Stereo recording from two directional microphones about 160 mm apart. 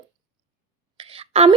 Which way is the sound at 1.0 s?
35° right (ahead or behind).